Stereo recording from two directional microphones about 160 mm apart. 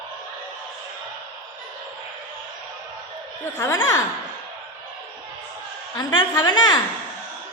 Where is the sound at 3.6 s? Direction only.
20° left (ahead or behind).